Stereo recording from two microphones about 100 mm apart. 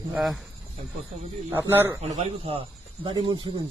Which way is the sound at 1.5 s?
20° right (ahead or behind).